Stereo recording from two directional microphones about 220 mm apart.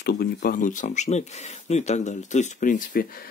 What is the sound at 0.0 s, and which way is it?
Speech, 45° left (ahead or behind).